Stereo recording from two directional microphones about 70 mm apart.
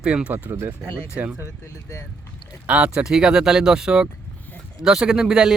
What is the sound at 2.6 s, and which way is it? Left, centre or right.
Speech, centre.